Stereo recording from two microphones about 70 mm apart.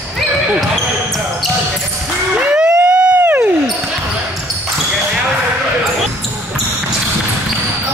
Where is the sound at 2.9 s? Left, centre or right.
Centre.